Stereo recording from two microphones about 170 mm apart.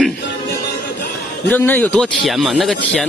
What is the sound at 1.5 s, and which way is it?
Speech, 10° left (ahead or behind).